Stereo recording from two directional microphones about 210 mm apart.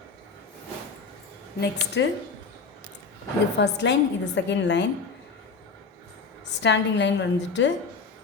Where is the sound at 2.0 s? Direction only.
60° left (ahead or behind).